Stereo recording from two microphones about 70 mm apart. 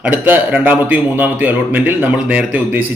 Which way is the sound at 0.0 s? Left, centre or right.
Right.